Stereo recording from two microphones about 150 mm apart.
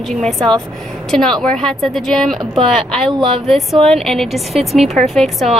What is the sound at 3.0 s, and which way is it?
Speech, 35° right (ahead or behind).